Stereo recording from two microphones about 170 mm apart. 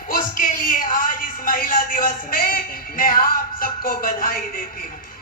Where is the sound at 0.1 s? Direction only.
50° left (ahead or behind).